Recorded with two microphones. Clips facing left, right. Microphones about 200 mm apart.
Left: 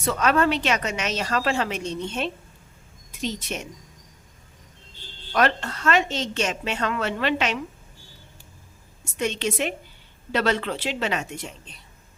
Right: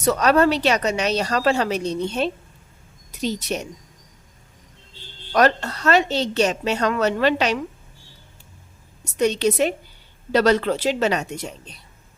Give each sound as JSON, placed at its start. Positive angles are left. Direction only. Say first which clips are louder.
{"t": 0.0, "sound": "a woman's voice", "louder": "right 4 dB", "side_deg": -40}
{"t": 5.3, "sound": "a woman's voice", "louder": "right 4 dB", "side_deg": -40}
{"t": 9.1, "sound": "a woman's voice", "louder": "right 7 dB", "side_deg": -40}